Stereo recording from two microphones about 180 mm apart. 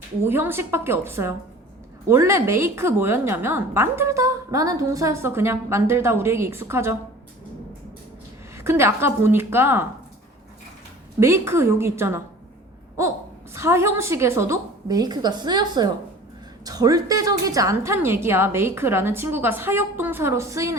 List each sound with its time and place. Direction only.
0.3 s a woman's voice: 10° right (ahead or behind)
8.5 s a woman's voice: 15° right (ahead or behind)
11.2 s a woman's voice: 15° right (ahead or behind)
13.5 s a woman's voice: 15° right (ahead or behind)